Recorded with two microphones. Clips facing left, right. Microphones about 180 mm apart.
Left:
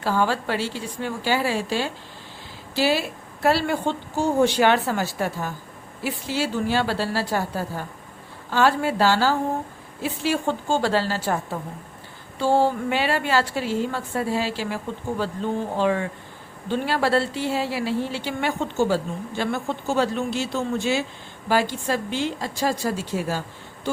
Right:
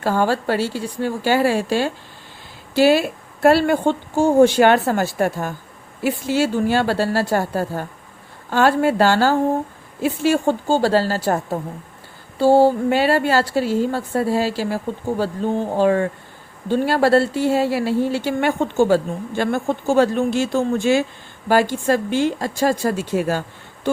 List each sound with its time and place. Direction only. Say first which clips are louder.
0.0 s a woman's voice: right 4 dB; 50° right (ahead or behind)
12.4 s a woman's voice: right 7 dB; 40° right (ahead or behind); by 23.4 s 60° right (ahead or behind)
23.9 s a sound: right 6 dB; 55° right (ahead or behind)